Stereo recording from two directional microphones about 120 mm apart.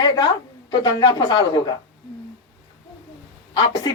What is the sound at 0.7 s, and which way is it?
A woman's voice, 35° left (ahead or behind).